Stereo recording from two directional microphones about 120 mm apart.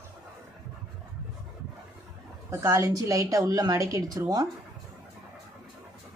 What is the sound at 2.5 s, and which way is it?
Speech, 25° right (ahead or behind).